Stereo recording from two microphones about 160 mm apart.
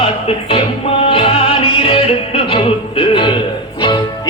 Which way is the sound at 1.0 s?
35° left (ahead or behind).